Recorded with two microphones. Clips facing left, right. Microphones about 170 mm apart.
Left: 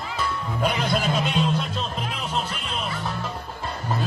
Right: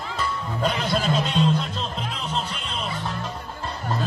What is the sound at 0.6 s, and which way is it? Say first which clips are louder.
Music: even; 10° left (ahead or behind).